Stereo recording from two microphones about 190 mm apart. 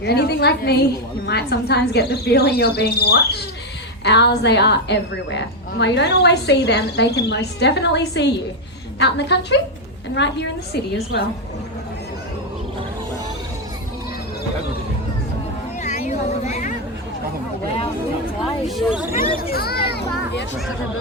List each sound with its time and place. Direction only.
0.0 s a woman's voice: 60° left (ahead or behind)
15.8 s a sound: 40° left (ahead or behind)
18.8 s speech: 5° right (ahead or behind)
19.1 s speech: 30° left (ahead or behind)
19.4 s a child's voice: 55° left (ahead or behind)
19.9 s children playing: 60° left (ahead or behind)